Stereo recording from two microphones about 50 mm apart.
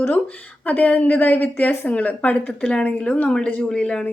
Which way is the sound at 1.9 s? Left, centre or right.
Left.